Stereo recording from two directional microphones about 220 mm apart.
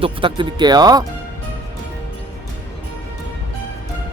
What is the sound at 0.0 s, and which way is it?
Speech, 25° right (ahead or behind).